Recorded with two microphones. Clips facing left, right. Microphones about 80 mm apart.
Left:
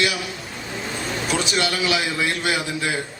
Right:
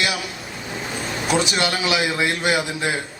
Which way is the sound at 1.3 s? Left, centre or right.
Right.